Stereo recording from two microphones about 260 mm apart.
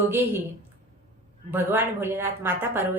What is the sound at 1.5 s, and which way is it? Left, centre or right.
A woman's voice, centre.